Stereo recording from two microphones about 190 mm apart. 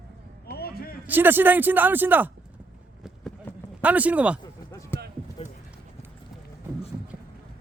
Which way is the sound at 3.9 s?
10° right (ahead or behind).